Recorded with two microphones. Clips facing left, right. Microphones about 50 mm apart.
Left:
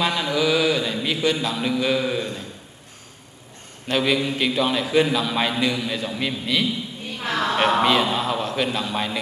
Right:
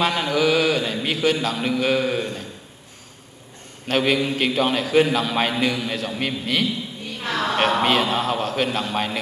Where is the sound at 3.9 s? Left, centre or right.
Right.